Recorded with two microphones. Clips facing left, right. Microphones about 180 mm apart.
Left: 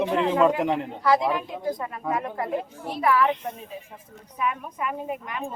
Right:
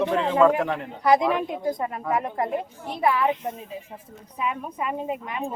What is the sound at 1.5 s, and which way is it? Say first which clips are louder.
A woman's voice: right 3 dB; 20° right (ahead or behind).